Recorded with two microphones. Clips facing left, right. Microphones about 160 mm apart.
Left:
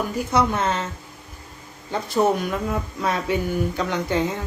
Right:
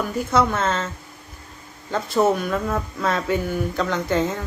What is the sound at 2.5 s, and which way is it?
Speech, 15° left (ahead or behind).